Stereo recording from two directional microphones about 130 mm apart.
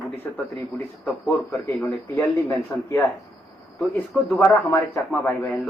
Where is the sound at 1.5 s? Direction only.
25° left (ahead or behind).